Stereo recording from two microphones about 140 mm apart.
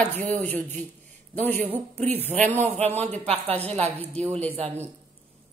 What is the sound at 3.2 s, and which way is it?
Speech, 45° right (ahead or behind).